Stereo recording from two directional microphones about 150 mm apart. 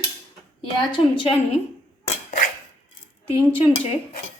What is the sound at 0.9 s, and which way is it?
Speech, 35° left (ahead or behind).